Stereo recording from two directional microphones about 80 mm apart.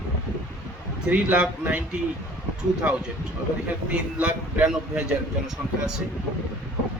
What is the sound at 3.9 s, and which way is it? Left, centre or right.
A man's voice, centre.